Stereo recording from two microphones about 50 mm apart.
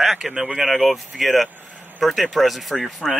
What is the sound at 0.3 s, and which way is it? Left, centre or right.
Speech, right.